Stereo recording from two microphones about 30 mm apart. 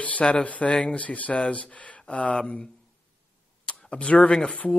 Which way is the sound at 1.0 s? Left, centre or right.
Left.